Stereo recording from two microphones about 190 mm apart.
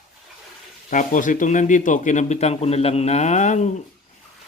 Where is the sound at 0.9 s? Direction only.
45° left (ahead or behind).